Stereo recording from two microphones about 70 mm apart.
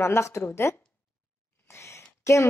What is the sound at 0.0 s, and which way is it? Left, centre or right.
Speech, left.